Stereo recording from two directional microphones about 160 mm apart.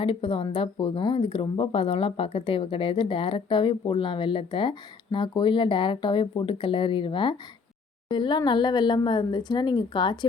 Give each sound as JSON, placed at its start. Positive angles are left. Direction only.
{"t": 0.0, "sound": "a woman's voice", "side_deg": 35}